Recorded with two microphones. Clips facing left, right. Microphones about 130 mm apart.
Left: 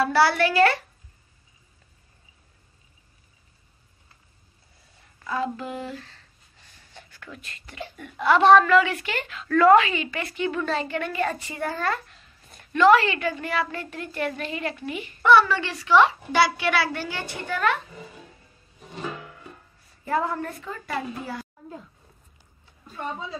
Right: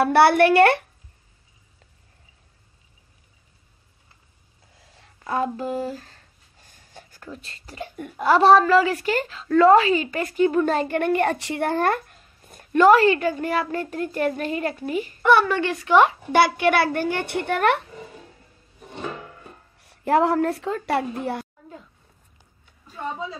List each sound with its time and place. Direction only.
0.0 s speech: 55° right (ahead or behind)
5.3 s a sound: 45° right (ahead or behind)
7.8 s a woman's voice: 45° right (ahead or behind); by 17.8 s 65° right (ahead or behind)
19.8 s a woman's voice: 75° right (ahead or behind)
21.1 s speech: 60° right (ahead or behind)